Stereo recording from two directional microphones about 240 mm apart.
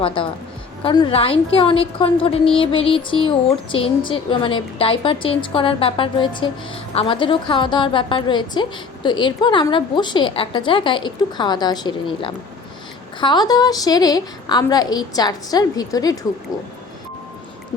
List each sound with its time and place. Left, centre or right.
0.0 s a woman's voice: left